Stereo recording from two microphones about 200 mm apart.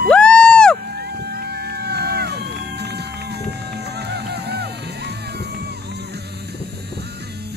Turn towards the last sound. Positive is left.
turn(degrees=-55)  # may be behind; listen again after turning